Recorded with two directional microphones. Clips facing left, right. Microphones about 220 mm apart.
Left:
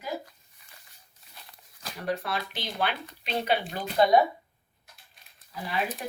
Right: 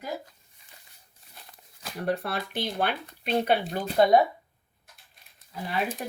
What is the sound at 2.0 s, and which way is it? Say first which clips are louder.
Speech: right 2 dB; 55° right (ahead or behind).